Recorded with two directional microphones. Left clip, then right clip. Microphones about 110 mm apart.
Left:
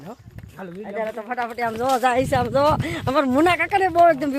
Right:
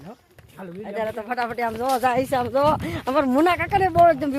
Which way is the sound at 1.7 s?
25° left (ahead or behind).